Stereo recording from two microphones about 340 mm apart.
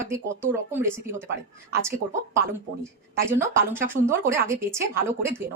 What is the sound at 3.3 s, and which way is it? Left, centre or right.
A woman's voice, centre.